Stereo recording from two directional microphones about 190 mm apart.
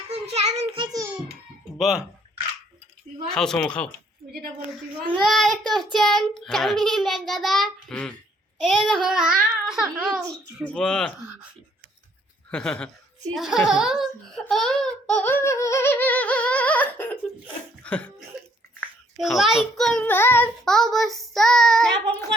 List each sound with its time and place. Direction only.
0.1 s child singing: 35° right (ahead or behind)
1.8 s a child's voice: 5° right (ahead or behind)
3.2 s a child's voice: 5° left (ahead or behind)
5.1 s a child's voice: centre (ahead or behind)
10.2 s a child's voice: 5° left (ahead or behind)
12.5 s a child's voice: 5° left (ahead or behind)
19.1 s a child's voice: centre (ahead or behind)